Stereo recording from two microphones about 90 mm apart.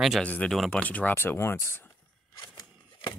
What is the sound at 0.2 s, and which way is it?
Speech, 15° left (ahead or behind).